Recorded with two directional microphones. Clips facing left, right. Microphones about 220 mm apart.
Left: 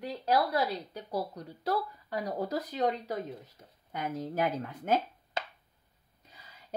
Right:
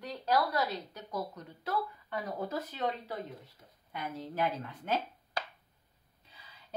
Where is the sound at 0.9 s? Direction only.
35° left (ahead or behind).